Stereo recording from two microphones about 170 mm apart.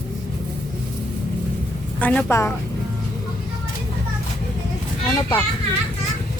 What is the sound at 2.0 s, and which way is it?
Speech, 10° left (ahead or behind).